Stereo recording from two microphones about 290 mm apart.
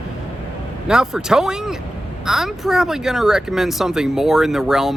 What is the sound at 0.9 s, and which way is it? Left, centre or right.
Speech, centre.